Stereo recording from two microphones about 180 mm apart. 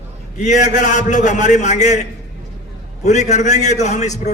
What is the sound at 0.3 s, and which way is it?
A man's voice, 40° left (ahead or behind).